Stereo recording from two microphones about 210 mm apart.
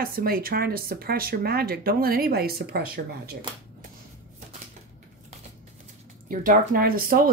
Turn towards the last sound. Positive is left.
turn(degrees=-45)  # may be behind; listen again after turning